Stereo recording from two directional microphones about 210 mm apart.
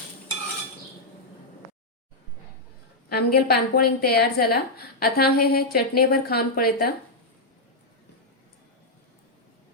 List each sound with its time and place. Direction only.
3.1 s a woman's voice: 45° left (ahead or behind)